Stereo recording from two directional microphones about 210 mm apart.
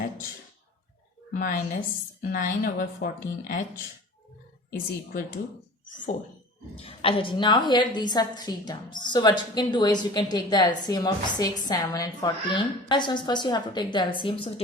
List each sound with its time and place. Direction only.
1.3 s a woman's voice: 40° left (ahead or behind)
4.7 s speech: 45° left (ahead or behind)
6.7 s a woman's voice: 25° left (ahead or behind)